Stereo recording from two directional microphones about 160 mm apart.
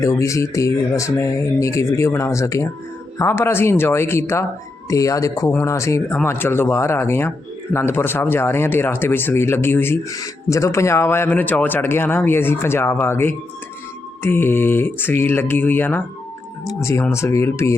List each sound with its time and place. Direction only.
0.0 s speech: 20° left (ahead or behind)